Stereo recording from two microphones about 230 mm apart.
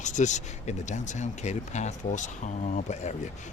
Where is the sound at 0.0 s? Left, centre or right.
Left.